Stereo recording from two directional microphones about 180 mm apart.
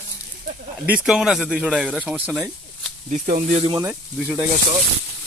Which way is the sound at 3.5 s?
30° right (ahead or behind).